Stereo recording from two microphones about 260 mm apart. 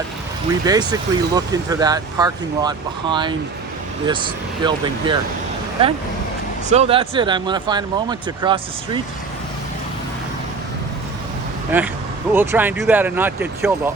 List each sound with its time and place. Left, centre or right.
0.6 s speech: centre
6.7 s speech: right
11.7 s speech: centre